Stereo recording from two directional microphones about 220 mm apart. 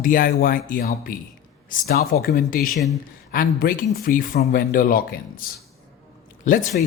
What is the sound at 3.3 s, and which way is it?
Speech, 40° left (ahead or behind).